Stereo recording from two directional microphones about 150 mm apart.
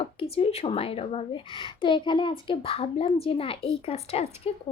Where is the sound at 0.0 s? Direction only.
40° left (ahead or behind).